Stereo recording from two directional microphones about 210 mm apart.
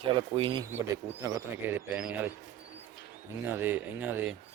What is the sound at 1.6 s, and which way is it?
Speech, 5° right (ahead or behind).